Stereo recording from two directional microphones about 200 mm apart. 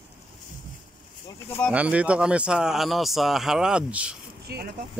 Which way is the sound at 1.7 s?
5° right (ahead or behind).